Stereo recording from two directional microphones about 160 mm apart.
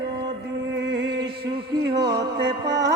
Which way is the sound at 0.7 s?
90° right.